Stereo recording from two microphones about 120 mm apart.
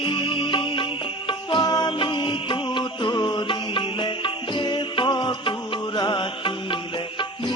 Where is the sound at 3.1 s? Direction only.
35° left (ahead or behind).